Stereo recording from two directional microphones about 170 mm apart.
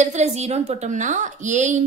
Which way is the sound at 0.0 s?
40° right (ahead or behind).